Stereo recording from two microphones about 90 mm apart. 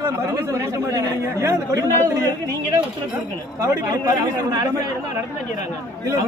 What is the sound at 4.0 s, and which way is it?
Speech, 45° right (ahead or behind).